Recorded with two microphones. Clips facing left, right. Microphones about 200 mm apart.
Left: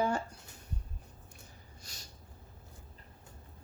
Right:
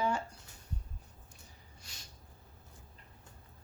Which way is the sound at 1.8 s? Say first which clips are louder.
Left 2 dB; 40° left (ahead or behind).